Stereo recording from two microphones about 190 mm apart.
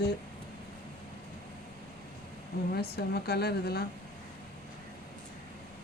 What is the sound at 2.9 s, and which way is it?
Speech, 60° left (ahead or behind).